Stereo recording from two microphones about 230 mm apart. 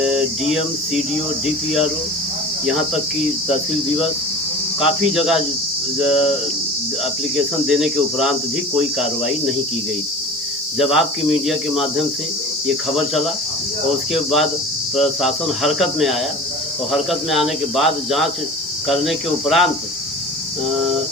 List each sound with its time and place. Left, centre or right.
0.0 s a sound: centre
4.8 s speech: centre
7.3 s speech: centre
10.8 s speech: centre